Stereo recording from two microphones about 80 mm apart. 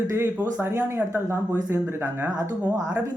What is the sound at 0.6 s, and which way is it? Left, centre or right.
Speech, right.